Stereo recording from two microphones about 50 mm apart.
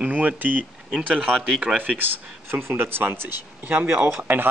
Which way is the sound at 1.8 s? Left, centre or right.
Right.